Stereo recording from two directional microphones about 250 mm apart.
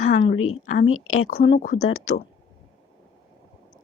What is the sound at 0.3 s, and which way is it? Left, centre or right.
Speech, left.